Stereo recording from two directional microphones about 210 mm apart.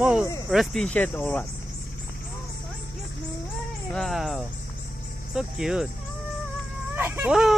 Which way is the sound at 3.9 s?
Centre (ahead or behind).